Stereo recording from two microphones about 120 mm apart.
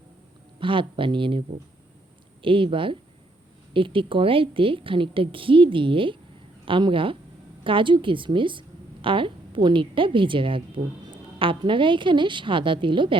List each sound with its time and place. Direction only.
0.6 s a woman's voice: 45° right (ahead or behind)